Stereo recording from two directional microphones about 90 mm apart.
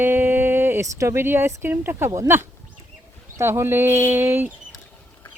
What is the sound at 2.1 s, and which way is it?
Speech, 35° right (ahead or behind).